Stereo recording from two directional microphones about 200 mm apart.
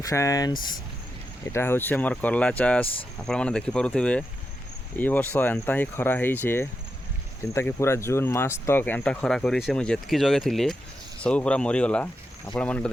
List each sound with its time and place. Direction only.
0.0 s speech: 15° left (ahead or behind)
1.5 s speech: 10° left (ahead or behind)